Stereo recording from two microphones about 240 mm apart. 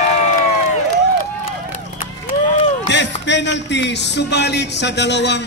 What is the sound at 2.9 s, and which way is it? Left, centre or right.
Music, left.